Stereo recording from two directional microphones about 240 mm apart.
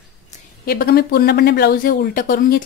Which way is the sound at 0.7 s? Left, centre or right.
Left.